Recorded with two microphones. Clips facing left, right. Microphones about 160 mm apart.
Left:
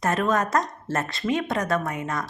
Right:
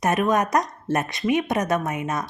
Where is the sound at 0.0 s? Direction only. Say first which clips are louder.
Right 2 dB; 20° right (ahead or behind).